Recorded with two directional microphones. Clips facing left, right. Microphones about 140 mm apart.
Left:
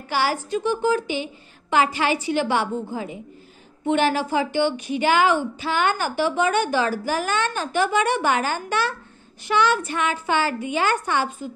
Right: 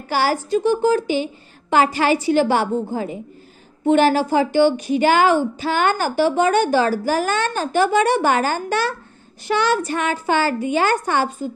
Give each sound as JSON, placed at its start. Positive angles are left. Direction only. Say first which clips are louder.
{"t": 0.1, "sound": "a woman's voice", "louder": "right 4 dB", "side_deg": -40}